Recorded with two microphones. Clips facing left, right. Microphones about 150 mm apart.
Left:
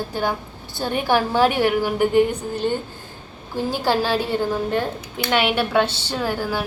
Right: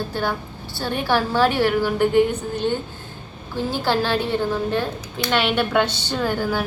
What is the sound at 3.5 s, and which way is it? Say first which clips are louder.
A woman's voice: left 1 dB; 10° left (ahead or behind).